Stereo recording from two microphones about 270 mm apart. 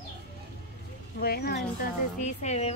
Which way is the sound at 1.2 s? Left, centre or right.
Left.